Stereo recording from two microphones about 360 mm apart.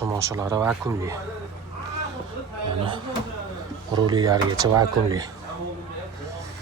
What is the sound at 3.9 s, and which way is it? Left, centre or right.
Speech, centre.